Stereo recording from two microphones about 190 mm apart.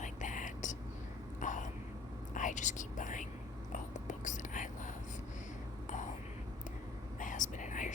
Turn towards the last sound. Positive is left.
turn(degrees=40)  # may be behind; listen again after turning